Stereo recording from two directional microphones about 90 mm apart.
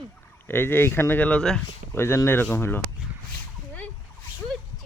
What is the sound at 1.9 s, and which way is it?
Speech, 25° left (ahead or behind).